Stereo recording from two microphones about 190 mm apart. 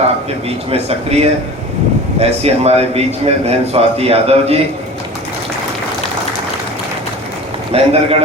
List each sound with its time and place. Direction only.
0.4 s a man's voice: 30° right (ahead or behind)
7.7 s a man's voice: 30° right (ahead or behind)